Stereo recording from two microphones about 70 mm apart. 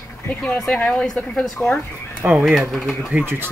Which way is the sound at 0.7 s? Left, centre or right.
Centre.